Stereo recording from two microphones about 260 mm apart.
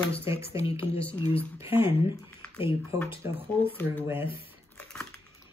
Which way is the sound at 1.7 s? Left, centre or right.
Centre.